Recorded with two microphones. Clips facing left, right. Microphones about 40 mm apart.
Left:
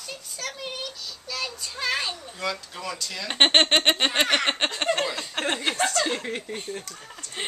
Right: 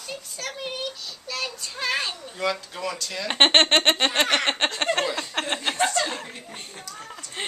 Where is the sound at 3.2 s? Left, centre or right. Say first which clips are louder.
Right 1 dB; centre.